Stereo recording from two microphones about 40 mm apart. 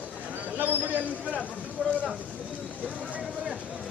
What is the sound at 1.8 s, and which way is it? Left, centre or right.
Speech, right.